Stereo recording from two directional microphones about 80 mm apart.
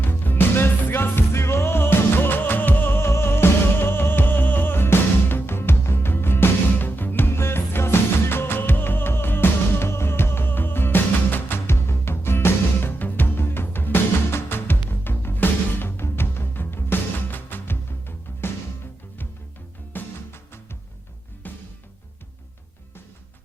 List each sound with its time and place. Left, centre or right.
0.0 s music: left
19.9 s music: left